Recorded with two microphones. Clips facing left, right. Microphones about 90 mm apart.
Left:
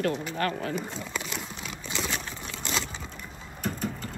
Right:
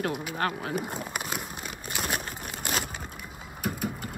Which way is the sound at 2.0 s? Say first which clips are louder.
Right 2 dB; 55° right (ahead or behind).